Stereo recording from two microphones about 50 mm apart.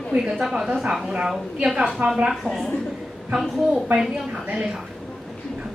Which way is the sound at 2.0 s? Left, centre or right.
Centre.